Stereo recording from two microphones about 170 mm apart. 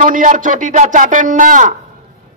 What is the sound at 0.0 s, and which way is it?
A man's voice, 50° right (ahead or behind).